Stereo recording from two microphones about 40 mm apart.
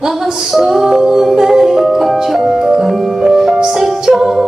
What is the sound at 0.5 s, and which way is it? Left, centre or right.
Music, centre.